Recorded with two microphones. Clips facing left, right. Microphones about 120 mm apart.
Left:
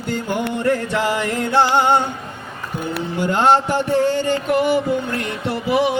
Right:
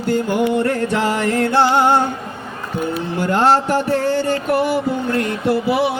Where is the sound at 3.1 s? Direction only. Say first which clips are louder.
Right 1 dB; 15° left (ahead or behind).